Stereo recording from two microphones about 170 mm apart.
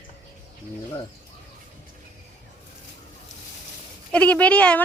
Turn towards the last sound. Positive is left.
turn(degrees=10)  # may be behind; listen again after turning